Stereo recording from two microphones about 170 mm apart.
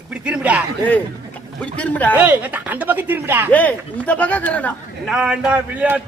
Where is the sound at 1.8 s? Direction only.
10° left (ahead or behind).